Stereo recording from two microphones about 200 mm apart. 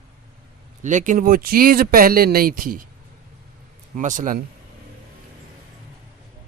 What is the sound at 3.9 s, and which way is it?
Speech, 40° right (ahead or behind).